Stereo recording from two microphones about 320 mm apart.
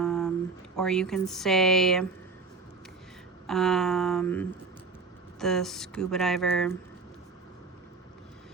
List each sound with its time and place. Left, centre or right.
0.0 s a sound: centre
0.8 s speech: centre
3.4 s speech: centre